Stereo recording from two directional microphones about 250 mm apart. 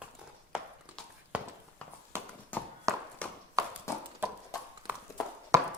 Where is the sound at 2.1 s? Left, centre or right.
Centre.